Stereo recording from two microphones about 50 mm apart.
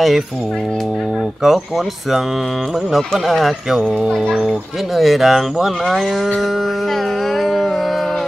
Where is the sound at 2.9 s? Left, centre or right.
Centre.